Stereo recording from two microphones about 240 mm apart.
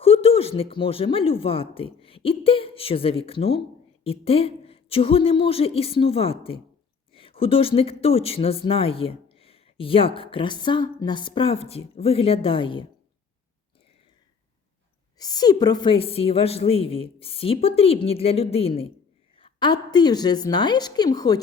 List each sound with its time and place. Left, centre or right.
0.0 s speech: left
15.2 s a woman's voice: centre